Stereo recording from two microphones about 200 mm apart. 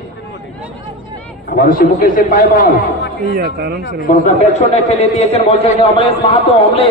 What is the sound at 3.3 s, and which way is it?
Speech, 55° right (ahead or behind).